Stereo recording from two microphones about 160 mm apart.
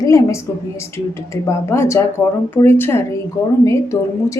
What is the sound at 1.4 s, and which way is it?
A woman's voice, 15° left (ahead or behind).